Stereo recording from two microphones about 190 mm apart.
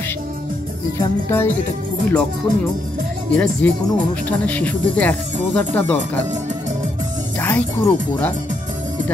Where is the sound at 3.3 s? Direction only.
5° left (ahead or behind).